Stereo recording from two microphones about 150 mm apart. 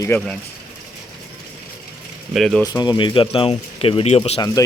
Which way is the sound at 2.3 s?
Centre (ahead or behind).